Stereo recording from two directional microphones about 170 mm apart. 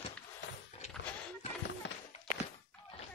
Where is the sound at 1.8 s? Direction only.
90° left.